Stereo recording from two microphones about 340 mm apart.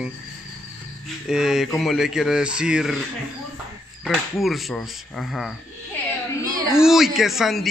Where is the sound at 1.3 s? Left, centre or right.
Centre.